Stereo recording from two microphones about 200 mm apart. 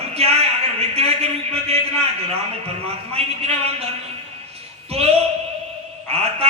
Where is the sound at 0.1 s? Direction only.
30° right (ahead or behind).